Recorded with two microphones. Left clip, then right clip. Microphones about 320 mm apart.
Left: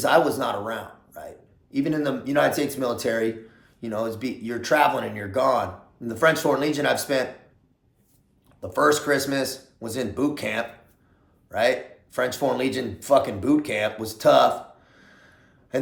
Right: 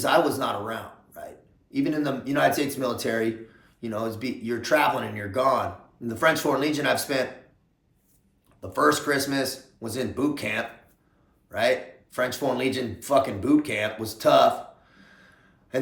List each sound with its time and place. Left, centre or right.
0.0 s speech: centre
8.6 s speech: centre
12.1 s speech: centre
14.9 s gasp: centre
15.7 s a sound: centre